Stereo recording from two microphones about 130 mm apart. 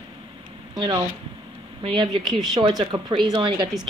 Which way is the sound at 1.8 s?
40° right (ahead or behind).